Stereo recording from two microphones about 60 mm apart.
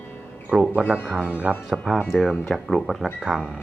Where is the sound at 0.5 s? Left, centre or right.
Centre.